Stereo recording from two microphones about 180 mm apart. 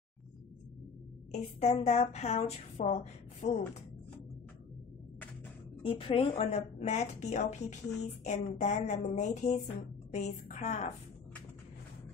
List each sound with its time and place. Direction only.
1.3 s speech: 35° left (ahead or behind)
5.8 s speech: 30° left (ahead or behind); by 10.9 s 45° left (ahead or behind)